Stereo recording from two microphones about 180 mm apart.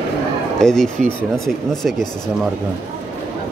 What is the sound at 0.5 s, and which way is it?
A man's voice, 5° left (ahead or behind).